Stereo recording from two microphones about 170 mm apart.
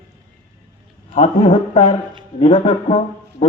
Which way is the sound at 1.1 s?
45° left (ahead or behind).